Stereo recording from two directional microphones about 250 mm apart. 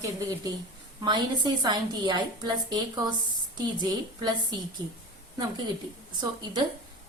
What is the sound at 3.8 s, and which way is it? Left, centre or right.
A woman's voice, centre.